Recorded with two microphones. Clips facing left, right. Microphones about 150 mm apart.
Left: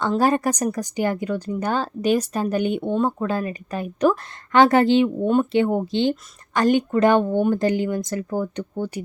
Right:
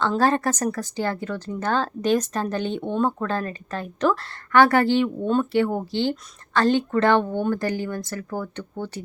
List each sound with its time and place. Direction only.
0.2 s speech: 10° left (ahead or behind)